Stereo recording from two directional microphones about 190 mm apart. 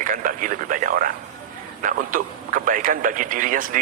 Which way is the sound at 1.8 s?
45° right (ahead or behind).